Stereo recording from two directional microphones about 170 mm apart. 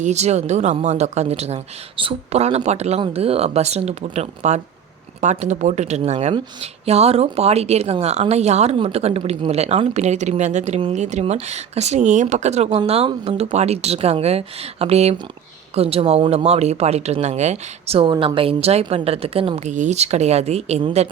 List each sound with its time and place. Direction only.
0.0 s speech: 40° right (ahead or behind)